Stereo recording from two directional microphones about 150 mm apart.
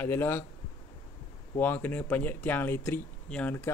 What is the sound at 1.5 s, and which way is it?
Speech, 10° left (ahead or behind).